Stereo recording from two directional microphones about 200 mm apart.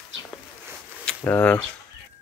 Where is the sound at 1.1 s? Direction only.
10° left (ahead or behind).